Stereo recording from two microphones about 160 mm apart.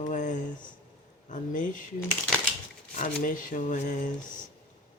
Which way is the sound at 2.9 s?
50° left (ahead or behind).